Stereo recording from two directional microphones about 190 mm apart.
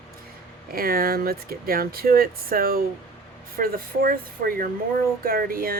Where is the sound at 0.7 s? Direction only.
50° right (ahead or behind).